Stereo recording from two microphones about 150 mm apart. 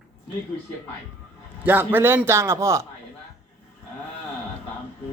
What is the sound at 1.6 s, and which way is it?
Speech, 15° right (ahead or behind).